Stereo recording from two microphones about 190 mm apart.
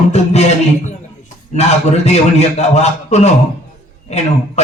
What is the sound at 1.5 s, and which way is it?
A man's voice, 35° left (ahead or behind).